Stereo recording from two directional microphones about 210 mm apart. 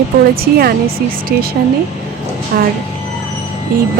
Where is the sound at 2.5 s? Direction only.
45° right (ahead or behind).